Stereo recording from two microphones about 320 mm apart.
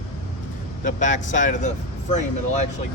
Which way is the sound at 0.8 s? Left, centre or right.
Left.